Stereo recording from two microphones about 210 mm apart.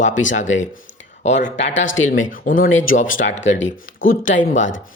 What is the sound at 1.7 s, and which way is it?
Speech, 65° left (ahead or behind).